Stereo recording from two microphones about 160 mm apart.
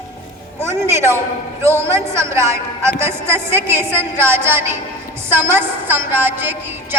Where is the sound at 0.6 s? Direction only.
15° right (ahead or behind).